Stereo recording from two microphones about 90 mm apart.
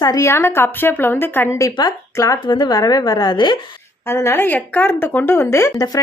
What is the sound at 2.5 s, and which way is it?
A woman's voice, 55° left (ahead or behind).